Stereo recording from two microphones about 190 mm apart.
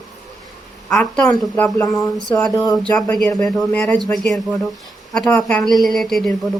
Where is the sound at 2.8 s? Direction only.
5° left (ahead or behind).